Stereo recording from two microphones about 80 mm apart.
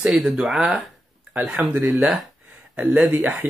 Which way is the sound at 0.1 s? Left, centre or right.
Centre.